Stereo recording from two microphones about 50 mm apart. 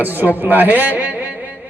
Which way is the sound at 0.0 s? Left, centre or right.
Right.